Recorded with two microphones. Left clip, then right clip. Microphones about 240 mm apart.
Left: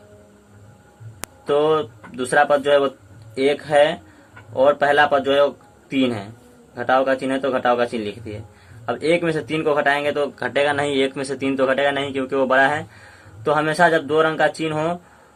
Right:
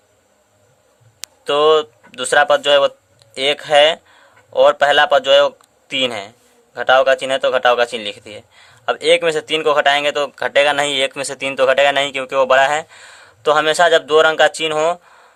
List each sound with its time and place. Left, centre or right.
1.5 s speech: right